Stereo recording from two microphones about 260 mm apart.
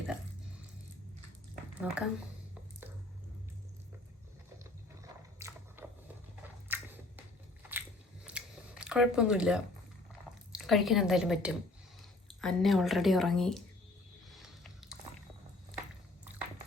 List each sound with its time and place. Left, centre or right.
1.8 s speech: centre
5.4 s biting: centre
6.7 s a sound: centre
7.7 s biting: centre
10.5 s speech: centre
14.3 s a sound: centre